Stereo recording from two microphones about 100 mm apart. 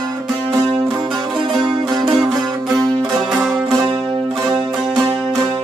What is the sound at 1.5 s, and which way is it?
Music, centre (ahead or behind).